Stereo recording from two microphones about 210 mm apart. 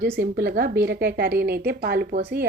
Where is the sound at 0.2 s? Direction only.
50° right (ahead or behind).